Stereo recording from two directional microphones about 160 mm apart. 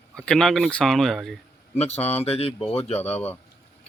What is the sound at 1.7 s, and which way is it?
Speech, 40° left (ahead or behind).